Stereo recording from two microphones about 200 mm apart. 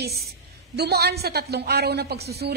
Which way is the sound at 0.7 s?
55° right (ahead or behind).